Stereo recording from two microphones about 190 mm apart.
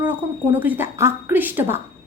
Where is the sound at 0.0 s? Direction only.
10° right (ahead or behind).